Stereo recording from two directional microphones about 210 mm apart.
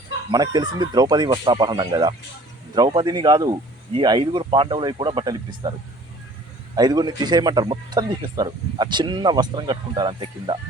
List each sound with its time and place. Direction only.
0.3 s speech: 20° right (ahead or behind)
6.7 s speech: 20° right (ahead or behind)